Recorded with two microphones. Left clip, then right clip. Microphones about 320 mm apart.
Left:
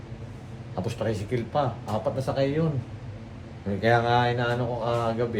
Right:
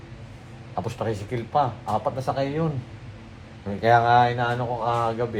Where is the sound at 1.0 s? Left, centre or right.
Centre.